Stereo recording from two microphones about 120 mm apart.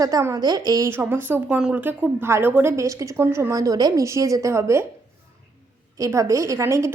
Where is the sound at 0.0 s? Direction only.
25° right (ahead or behind).